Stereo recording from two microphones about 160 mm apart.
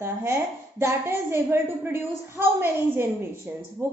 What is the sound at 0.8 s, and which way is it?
A woman's voice, 15° right (ahead or behind).